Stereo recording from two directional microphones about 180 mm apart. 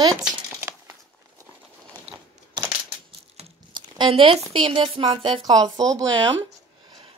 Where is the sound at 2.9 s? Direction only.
25° right (ahead or behind).